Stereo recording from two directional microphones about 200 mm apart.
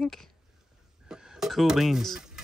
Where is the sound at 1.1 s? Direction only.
5° right (ahead or behind).